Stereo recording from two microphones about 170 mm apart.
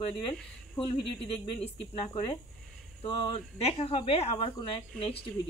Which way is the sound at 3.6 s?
35° left (ahead or behind).